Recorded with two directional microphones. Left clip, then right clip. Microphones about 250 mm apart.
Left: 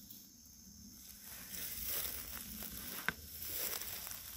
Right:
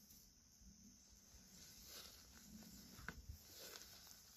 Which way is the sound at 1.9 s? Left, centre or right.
Left.